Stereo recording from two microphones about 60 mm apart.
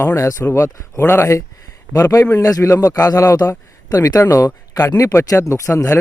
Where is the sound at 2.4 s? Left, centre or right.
Left.